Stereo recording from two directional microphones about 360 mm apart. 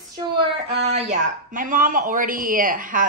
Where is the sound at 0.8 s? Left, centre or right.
Centre.